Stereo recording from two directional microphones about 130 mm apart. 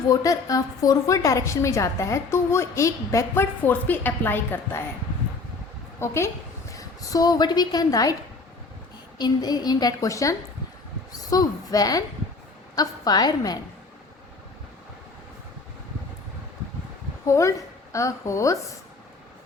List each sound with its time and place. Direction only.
0.1 s a woman's voice: 25° left (ahead or behind)
6.0 s a woman's voice: 20° left (ahead or behind)
9.1 s a woman's voice: 30° left (ahead or behind)
17.2 s a woman's voice: 25° left (ahead or behind)